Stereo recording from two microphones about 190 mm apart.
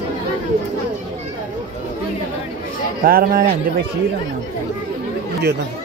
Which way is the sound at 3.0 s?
50° right (ahead or behind).